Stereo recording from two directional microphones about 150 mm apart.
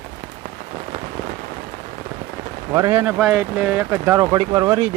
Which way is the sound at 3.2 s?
Centre (ahead or behind).